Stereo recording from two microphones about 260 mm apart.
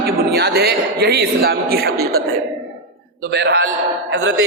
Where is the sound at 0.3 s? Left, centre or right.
Right.